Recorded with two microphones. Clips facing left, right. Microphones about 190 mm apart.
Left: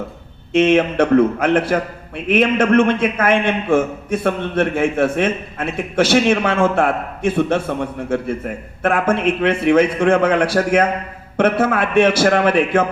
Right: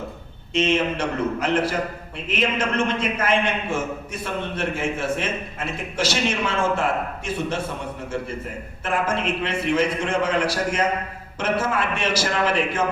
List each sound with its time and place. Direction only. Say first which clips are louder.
0.5 s a man's voice: left 8 dB; 60° left (ahead or behind)